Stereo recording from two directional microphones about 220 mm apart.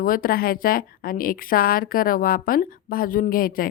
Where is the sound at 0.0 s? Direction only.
40° left (ahead or behind).